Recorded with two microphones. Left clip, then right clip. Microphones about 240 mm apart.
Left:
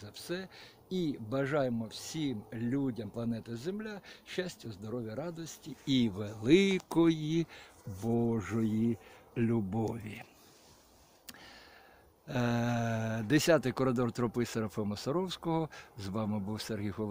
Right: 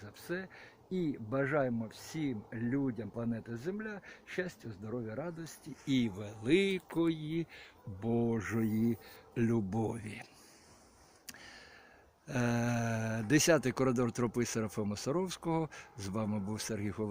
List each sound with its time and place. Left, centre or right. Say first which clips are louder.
0.3 s speech: even; centre
1.6 s speech: left 2 dB; centre
2.0 s speech: left 1 dB; centre
4.7 s speech: left 1 dB; centre
5.4 s speech: left 2 dB; centre; by 7.6 s left
8.0 s speech: left 1 dB; centre
11.3 s a sound: even; centre
12.3 s speech: left 1 dB; centre